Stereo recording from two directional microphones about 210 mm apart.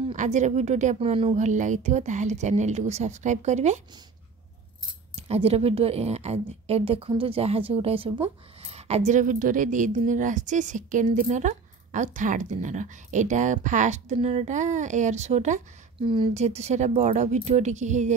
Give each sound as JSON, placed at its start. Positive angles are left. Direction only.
{"t": 0.1, "sound": "a woman's voice", "side_deg": -35}
{"t": 5.1, "sound": "a woman's voice", "side_deg": -30}